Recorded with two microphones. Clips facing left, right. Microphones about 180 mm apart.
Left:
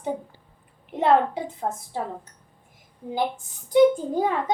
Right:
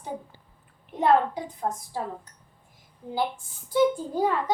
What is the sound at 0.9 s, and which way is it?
A woman's voice, 25° left (ahead or behind).